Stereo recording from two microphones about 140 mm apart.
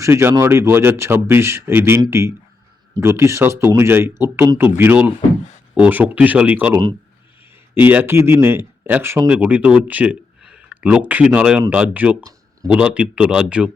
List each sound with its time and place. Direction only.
0.0 s speech: 15° right (ahead or behind)
7.8 s speech: 15° right (ahead or behind)